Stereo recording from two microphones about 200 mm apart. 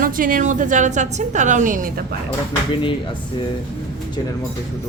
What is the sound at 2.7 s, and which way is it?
Speech, 25° left (ahead or behind).